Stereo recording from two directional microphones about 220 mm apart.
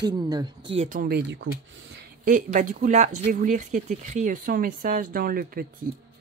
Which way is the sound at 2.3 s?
35° right (ahead or behind).